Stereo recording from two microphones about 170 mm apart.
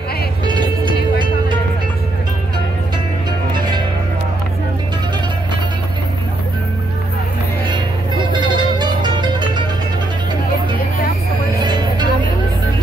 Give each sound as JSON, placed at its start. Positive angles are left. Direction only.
{"t": 7.6, "sound": "music", "side_deg": -25}
{"t": 11.6, "sound": "music", "side_deg": -25}